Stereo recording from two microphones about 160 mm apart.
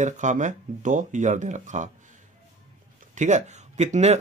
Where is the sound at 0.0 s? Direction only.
50° right (ahead or behind).